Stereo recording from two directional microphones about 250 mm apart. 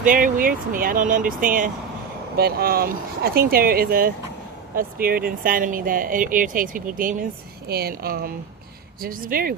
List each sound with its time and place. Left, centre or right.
0.0 s speech: right